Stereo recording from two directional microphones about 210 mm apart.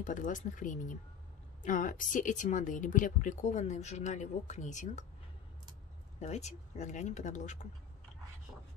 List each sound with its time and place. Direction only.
0.0 s a woman's voice: 35° left (ahead or behind)
6.1 s a woman's voice: 30° left (ahead or behind)